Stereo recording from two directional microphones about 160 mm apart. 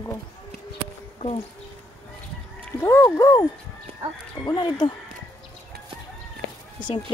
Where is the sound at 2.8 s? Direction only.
15° left (ahead or behind).